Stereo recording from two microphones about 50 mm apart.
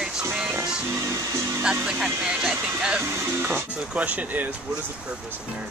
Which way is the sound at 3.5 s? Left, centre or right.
Right.